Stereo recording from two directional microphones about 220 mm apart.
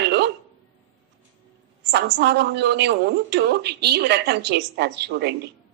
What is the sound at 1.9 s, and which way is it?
A woman's voice, 50° right (ahead or behind).